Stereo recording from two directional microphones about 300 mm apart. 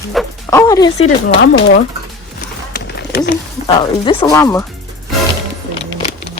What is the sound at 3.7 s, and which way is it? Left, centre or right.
Speech, centre.